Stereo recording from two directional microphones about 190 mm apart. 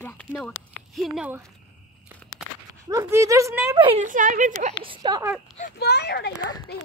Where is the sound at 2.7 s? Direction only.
15° right (ahead or behind).